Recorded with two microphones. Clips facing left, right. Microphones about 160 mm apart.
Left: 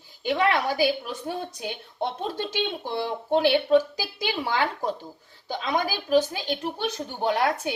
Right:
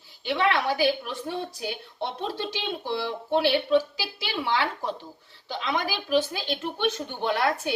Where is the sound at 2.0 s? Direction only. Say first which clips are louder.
Left 2 dB; 45° left (ahead or behind).